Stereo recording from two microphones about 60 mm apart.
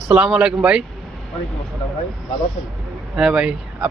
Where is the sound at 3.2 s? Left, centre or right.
Centre.